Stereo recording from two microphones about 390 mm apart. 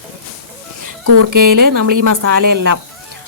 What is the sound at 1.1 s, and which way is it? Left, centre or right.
A woman's voice, right.